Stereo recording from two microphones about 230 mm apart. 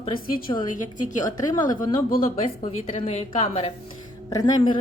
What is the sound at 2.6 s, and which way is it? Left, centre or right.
A woman's voice, left.